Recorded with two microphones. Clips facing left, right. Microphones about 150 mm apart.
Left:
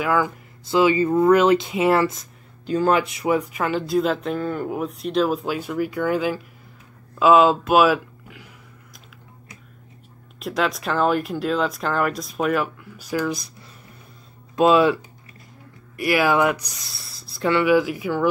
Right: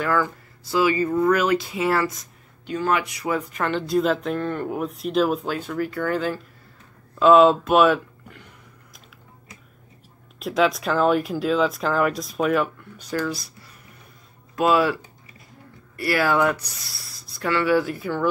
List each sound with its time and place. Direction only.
0.0 s speech: 10° left (ahead or behind)
0.7 s speech: 25° left (ahead or behind)
2.6 s speech: 35° left (ahead or behind)
3.3 s speech: 10° left (ahead or behind)
5.6 s speech: 10° left (ahead or behind)
10.4 s speech: centre (ahead or behind); by 13.5 s 15° left (ahead or behind)
14.5 s speech: 20° left (ahead or behind)
16.0 s speech: 15° left (ahead or behind)